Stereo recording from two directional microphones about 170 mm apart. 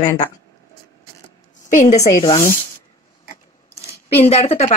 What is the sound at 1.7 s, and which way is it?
Speech, 45° left (ahead or behind).